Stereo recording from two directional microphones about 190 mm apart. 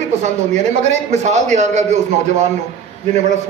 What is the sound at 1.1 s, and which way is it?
Speech, 35° right (ahead or behind).